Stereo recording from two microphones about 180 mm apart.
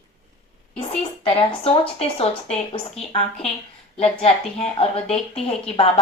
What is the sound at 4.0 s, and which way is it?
A woman's voice, 35° left (ahead or behind).